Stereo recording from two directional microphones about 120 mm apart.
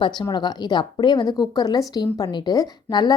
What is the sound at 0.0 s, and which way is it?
A woman's voice, 40° left (ahead or behind).